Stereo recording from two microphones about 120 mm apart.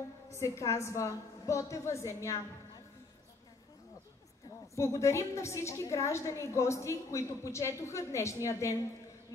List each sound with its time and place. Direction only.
0.4 s a woman's voice: 25° left (ahead or behind)
4.7 s a woman's voice: 25° left (ahead or behind)